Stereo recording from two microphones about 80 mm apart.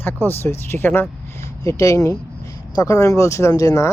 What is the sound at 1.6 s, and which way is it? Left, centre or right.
Speech, left.